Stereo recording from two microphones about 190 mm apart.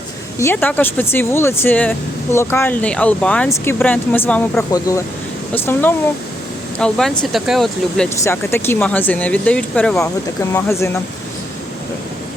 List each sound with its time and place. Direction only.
0.3 s speech: 10° left (ahead or behind)
8.2 s speech: 15° left (ahead or behind)